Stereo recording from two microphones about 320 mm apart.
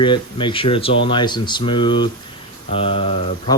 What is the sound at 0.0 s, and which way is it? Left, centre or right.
Speech, centre.